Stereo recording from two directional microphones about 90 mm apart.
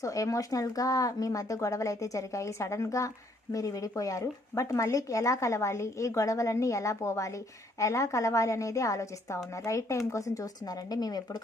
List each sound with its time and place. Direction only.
0.0 s speech: 40° left (ahead or behind)